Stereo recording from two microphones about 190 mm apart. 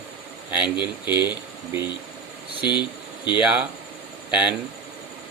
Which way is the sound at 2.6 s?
25° left (ahead or behind).